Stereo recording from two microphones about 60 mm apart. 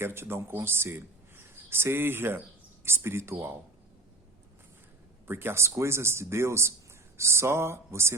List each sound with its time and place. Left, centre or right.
0.0 s speech: right
5.3 s speech: right